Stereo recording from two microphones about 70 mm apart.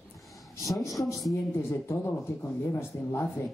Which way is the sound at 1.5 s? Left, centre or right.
Left.